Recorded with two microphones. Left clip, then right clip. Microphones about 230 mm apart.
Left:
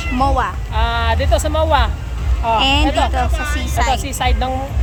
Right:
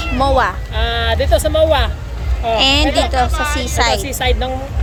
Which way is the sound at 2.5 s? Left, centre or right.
Centre.